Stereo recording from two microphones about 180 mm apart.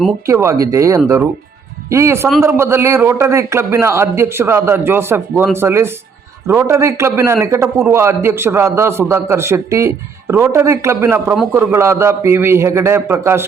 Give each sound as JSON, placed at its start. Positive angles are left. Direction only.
{"t": 0.3, "sound": "a man's voice", "side_deg": -15}